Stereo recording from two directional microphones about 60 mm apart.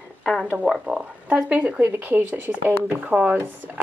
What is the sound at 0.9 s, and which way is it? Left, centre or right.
Speech, centre.